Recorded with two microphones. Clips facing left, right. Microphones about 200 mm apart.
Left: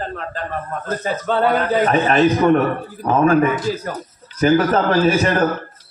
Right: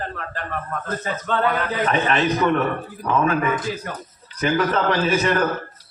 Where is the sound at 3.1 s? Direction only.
45° left (ahead or behind).